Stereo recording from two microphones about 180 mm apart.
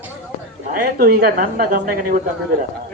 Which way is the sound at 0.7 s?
55° right (ahead or behind).